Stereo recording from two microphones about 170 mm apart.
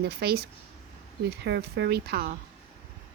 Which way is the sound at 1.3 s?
80° right.